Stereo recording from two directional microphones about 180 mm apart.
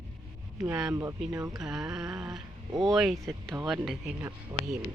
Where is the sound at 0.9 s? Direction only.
15° right (ahead or behind).